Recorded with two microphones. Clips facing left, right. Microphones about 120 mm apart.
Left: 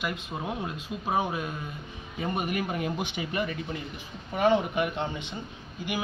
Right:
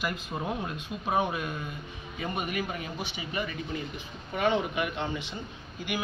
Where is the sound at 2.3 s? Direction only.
45° left (ahead or behind).